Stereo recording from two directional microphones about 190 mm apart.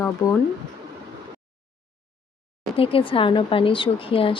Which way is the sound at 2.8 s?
30° left (ahead or behind).